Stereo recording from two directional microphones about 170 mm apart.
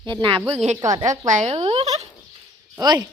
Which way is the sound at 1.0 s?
45° right (ahead or behind).